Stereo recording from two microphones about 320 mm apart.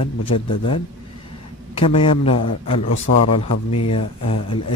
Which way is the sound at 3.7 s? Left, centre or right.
Left.